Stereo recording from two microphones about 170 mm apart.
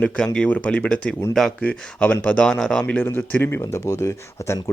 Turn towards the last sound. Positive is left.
turn(degrees=15)  # may be behind; listen again after turning